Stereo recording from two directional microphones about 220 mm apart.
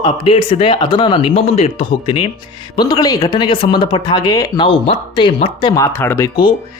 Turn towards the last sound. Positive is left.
turn(degrees=15)  # may be behind; listen again after turning